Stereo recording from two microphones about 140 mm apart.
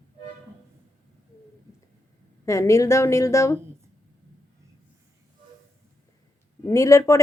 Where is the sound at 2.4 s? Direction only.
20° left (ahead or behind).